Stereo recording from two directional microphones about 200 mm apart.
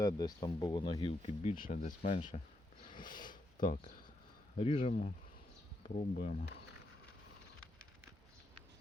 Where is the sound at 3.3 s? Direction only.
45° left (ahead or behind).